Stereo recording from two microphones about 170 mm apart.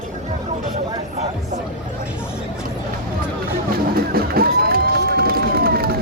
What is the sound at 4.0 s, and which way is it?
Run, 60° right (ahead or behind).